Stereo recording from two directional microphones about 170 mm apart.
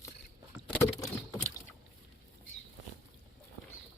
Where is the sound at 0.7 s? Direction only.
10° left (ahead or behind).